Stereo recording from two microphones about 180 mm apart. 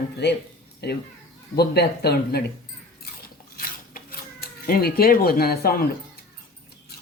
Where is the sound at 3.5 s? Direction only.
55° left (ahead or behind).